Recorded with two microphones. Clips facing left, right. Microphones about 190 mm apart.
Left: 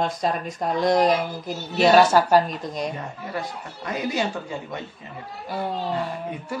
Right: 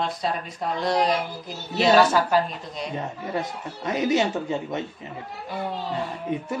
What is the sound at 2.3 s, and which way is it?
Speech, 45° left (ahead or behind).